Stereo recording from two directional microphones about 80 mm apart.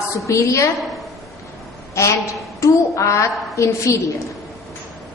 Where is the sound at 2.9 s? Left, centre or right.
Left.